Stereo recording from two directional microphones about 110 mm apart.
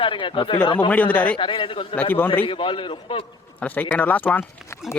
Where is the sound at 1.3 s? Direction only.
50° left (ahead or behind).